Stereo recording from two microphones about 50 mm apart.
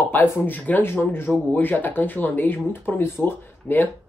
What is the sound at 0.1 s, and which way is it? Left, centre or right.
Speech, left.